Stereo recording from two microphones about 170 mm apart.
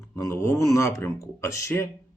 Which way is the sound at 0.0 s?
15° left (ahead or behind).